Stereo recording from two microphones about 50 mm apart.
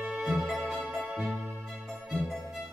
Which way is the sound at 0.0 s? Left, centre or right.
Centre.